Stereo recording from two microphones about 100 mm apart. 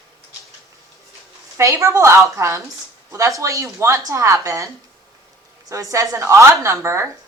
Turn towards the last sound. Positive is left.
turn(degrees=-30)  # may be behind; listen again after turning